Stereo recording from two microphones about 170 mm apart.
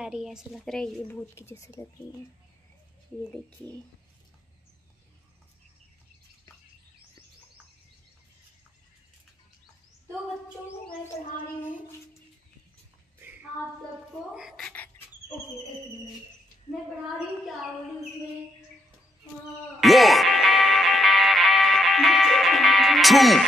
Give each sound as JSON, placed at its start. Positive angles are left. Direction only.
{"t": 0.0, "sound": "a woman's voice", "side_deg": -5}
{"t": 14.3, "sound": "speech", "side_deg": -5}
{"t": 19.8, "sound": "music", "side_deg": 0}